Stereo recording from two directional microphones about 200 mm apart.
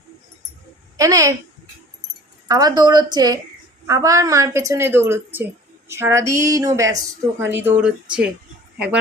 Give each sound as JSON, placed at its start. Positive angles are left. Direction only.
{"t": 0.9, "sound": "a woman's voice", "side_deg": -15}
{"t": 2.5, "sound": "a woman's voice", "side_deg": -20}